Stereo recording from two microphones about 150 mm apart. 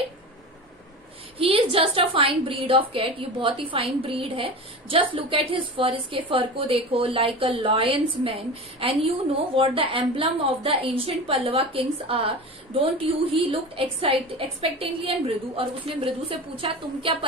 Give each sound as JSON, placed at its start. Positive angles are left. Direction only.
{"t": 1.4, "sound": "a woman's voice", "side_deg": -40}